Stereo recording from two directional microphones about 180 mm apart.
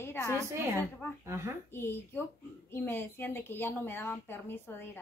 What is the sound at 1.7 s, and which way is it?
A woman's voice, 15° left (ahead or behind).